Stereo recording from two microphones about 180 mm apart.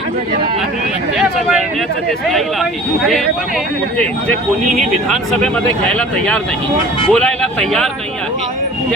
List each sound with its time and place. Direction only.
5.0 s speech: centre (ahead or behind)